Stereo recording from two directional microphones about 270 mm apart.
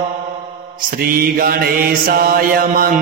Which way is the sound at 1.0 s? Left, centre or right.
Right.